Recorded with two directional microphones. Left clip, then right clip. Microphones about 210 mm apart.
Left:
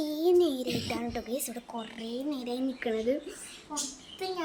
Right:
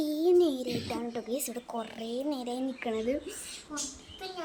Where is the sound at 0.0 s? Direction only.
5° right (ahead or behind).